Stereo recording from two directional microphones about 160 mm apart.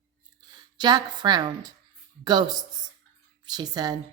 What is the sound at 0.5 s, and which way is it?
A woman's voice, 25° right (ahead or behind).